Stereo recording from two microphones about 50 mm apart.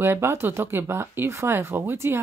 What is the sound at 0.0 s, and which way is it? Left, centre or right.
Speech, right.